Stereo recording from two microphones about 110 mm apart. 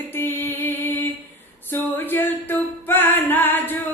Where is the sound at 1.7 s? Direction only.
20° left (ahead or behind).